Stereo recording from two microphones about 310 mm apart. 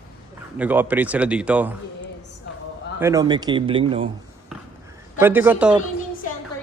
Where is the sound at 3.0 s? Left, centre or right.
Centre.